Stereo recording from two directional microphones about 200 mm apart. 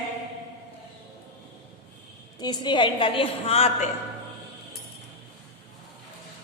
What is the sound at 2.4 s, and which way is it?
A woman's voice, 20° left (ahead or behind).